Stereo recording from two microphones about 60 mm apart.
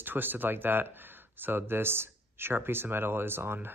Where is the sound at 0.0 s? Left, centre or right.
Right.